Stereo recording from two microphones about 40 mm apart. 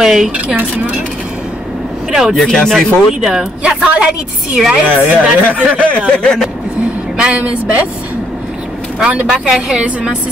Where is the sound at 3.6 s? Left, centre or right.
Right.